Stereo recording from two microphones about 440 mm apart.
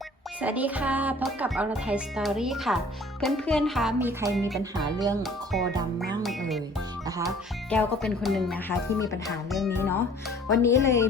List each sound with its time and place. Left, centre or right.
0.4 s speech: centre
7.7 s speech: centre